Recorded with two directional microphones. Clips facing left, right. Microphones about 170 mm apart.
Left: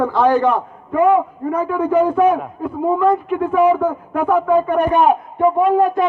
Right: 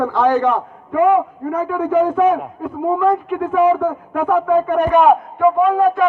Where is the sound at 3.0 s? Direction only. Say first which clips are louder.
Left 1 dB; 35° left (ahead or behind).